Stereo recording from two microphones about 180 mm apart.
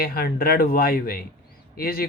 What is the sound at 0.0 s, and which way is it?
Speech, 55° left (ahead or behind).